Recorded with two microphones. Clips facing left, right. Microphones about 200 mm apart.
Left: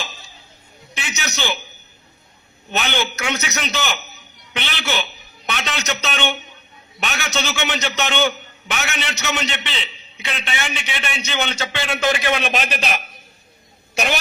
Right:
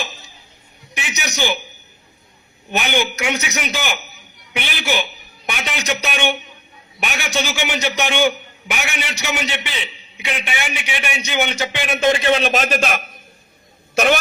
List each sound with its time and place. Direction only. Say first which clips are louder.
0.9 s a man's voice: right 3 dB; 15° right (ahead or behind)
2.6 s a man's voice: right 3 dB; 15° right (ahead or behind); by 14.2 s 55° right (ahead or behind)